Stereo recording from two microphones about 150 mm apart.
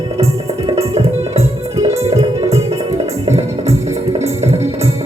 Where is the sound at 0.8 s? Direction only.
45° right (ahead or behind).